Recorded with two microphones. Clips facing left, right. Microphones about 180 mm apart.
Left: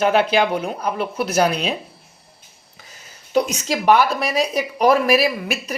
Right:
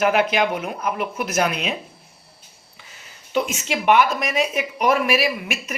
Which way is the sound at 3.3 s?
40° left (ahead or behind).